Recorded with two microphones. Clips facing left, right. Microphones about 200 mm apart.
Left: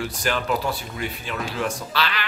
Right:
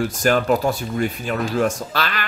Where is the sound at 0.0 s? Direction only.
45° right (ahead or behind).